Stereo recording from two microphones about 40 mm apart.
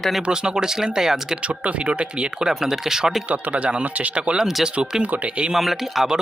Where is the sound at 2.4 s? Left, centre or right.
Centre.